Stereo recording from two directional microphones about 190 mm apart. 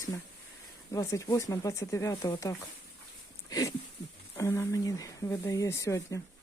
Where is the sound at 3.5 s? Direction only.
20° left (ahead or behind).